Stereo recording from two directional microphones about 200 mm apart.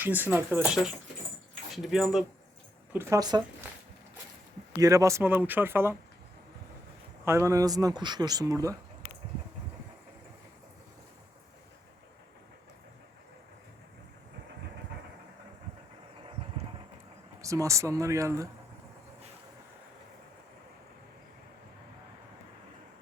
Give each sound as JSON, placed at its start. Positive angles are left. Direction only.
{"t": 0.0, "sound": "speech", "side_deg": -10}
{"t": 2.9, "sound": "speech", "side_deg": -15}
{"t": 4.7, "sound": "speech", "side_deg": -15}
{"t": 7.3, "sound": "speech", "side_deg": -15}
{"t": 17.4, "sound": "speech", "side_deg": -15}